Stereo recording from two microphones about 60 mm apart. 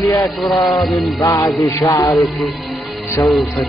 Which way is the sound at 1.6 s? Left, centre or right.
Left.